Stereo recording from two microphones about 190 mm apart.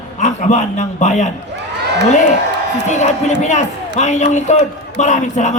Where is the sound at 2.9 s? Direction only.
35° left (ahead or behind).